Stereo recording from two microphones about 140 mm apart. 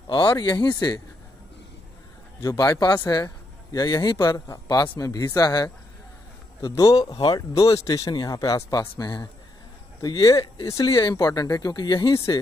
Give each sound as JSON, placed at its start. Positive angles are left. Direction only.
{"t": 0.1, "sound": "speech", "side_deg": 30}
{"t": 2.4, "sound": "speech", "side_deg": 25}